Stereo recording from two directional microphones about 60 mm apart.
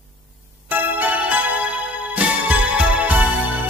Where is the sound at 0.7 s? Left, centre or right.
Right.